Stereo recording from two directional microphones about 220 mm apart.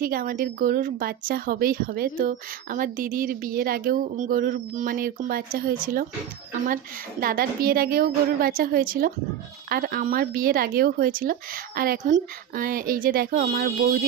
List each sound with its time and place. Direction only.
0.0 s speech: 40° right (ahead or behind)